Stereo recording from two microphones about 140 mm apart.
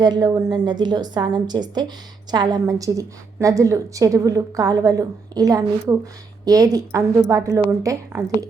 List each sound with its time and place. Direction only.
0.0 s a woman's voice: 30° right (ahead or behind)